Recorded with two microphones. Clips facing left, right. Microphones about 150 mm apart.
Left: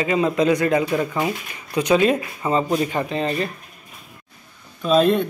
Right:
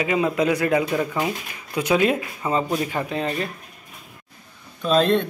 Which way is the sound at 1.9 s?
10° right (ahead or behind).